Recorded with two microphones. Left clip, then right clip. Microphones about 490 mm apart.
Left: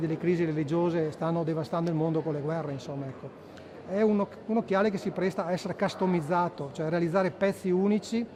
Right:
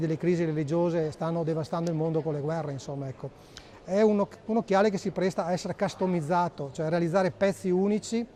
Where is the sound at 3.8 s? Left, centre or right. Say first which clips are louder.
Right 3 dB; right.